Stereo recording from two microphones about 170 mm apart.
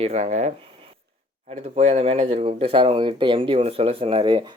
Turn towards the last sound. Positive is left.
turn(degrees=-30)  # may be behind; listen again after turning